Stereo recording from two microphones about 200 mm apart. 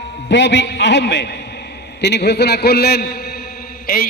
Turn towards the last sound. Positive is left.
turn(degrees=45)  # may be behind; listen again after turning